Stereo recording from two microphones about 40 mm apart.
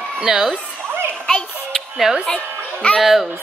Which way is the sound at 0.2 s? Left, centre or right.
Centre.